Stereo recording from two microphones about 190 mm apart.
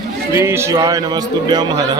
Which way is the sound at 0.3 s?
15° right (ahead or behind).